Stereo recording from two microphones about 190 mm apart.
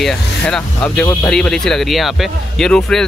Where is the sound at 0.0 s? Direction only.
5° left (ahead or behind).